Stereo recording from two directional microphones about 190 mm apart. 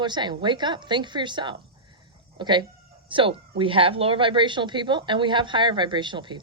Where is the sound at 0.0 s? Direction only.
25° right (ahead or behind).